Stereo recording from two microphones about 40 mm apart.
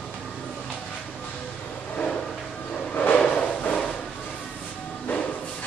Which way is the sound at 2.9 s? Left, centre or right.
Left.